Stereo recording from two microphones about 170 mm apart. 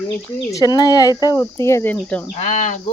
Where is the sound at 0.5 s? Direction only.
25° left (ahead or behind).